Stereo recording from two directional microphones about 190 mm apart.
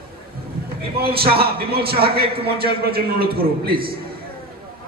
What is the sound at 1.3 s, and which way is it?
A man's voice, 55° right (ahead or behind).